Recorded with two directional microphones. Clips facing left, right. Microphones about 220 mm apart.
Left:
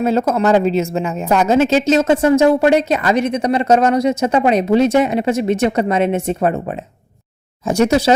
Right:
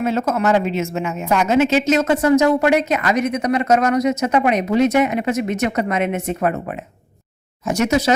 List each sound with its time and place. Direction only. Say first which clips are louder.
0.0 s a woman's voice: left 4 dB; 35° left (ahead or behind)